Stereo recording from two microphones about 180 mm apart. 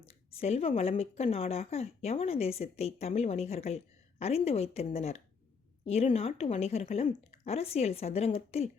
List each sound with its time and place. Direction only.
0.3 s speech: 35° left (ahead or behind)